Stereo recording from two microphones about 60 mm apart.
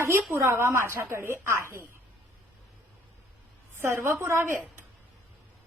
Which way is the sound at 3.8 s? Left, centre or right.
Right.